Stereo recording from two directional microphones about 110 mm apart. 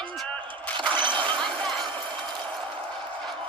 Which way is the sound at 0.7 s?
45° right (ahead or behind).